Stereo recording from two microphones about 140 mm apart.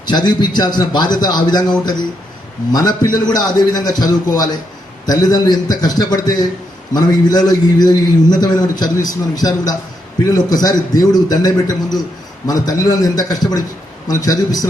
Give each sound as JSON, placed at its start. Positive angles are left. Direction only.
{"t": 0.0, "sound": "a man's voice", "side_deg": 30}
{"t": 2.7, "sound": "a man's voice", "side_deg": 30}